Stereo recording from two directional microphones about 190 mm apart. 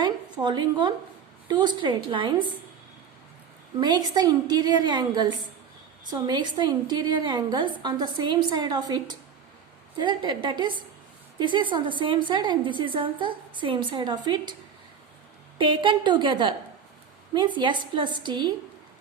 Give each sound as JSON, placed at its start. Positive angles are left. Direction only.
{"t": 0.0, "sound": "a woman's voice", "side_deg": -25}
{"t": 3.8, "sound": "a woman's voice", "side_deg": -20}
{"t": 15.5, "sound": "a woman's voice", "side_deg": -25}